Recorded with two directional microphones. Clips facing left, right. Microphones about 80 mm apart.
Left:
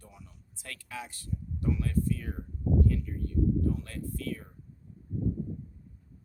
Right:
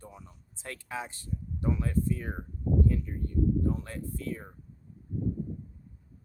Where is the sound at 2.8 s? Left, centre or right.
Right.